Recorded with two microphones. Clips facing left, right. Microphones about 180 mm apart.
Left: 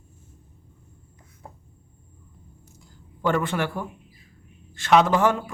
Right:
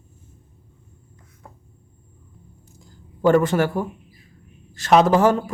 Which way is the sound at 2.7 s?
40° right (ahead or behind).